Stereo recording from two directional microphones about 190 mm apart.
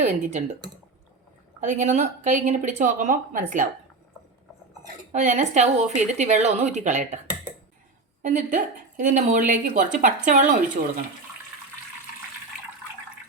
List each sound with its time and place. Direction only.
0.0 s a woman's voice: 35° right (ahead or behind)
1.6 s a woman's voice: 40° right (ahead or behind)
5.1 s a woman's voice: 40° right (ahead or behind)
8.2 s a woman's voice: 40° right (ahead or behind)